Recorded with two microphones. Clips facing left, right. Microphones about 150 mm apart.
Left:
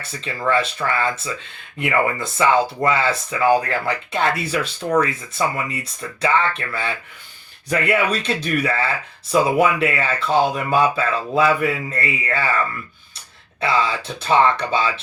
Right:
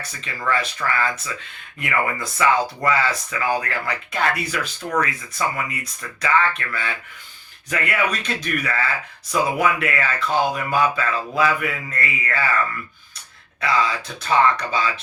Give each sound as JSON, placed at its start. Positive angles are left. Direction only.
{"t": 0.3, "sound": "speech", "side_deg": 25}
{"t": 13.6, "sound": "speech", "side_deg": 30}